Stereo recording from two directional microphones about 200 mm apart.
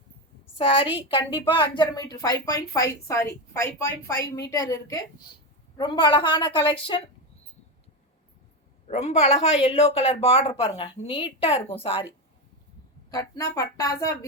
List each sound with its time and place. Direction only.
0.5 s a woman's voice: 25° left (ahead or behind)
8.9 s a woman's voice: 35° left (ahead or behind)
13.1 s speech: 20° left (ahead or behind)